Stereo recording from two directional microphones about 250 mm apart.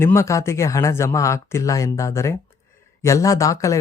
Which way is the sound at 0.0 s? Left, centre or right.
Centre.